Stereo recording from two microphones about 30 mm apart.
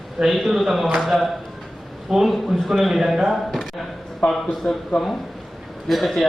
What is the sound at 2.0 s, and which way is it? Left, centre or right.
A man's voice, centre.